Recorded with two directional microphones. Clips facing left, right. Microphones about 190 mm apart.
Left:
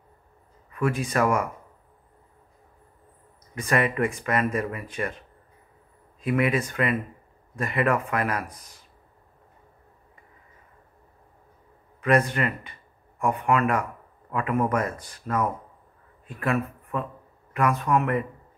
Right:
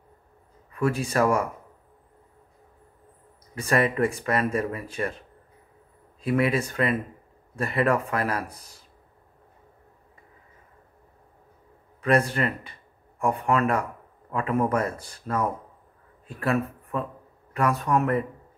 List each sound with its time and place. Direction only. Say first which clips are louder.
0.7 s speech: right 1 dB; 30° right (ahead or behind)
3.5 s speech: right 1 dB; 35° right (ahead or behind)
6.2 s speech: even; 35° right (ahead or behind)
12.3 s a man's voice: even; 35° right (ahead or behind)